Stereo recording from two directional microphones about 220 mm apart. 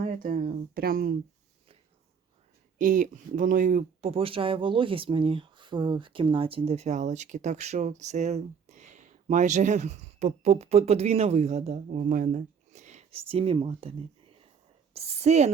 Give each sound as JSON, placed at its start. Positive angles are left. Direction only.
{"t": 0.0, "sound": "speech", "side_deg": -40}
{"t": 2.7, "sound": "speech", "side_deg": -35}
{"t": 14.9, "sound": "speech", "side_deg": -30}